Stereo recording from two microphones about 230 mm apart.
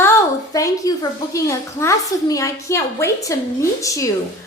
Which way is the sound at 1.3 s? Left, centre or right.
Centre.